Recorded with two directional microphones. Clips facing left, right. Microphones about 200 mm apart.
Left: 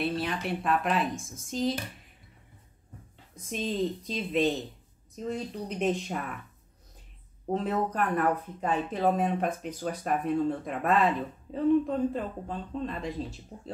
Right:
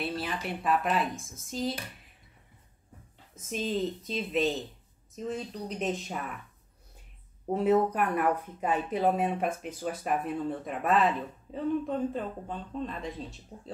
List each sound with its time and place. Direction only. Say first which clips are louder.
0.0 s speech: left 3 dB; centre (ahead or behind)
3.3 s speech: even; centre (ahead or behind)
7.5 s speech: right 4 dB; 10° right (ahead or behind)